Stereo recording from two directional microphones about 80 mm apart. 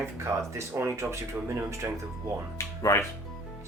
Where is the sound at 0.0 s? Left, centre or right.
Right.